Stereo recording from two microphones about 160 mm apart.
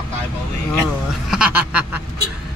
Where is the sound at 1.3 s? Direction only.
5° right (ahead or behind).